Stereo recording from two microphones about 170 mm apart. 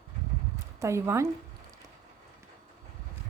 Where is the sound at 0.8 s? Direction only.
15° right (ahead or behind).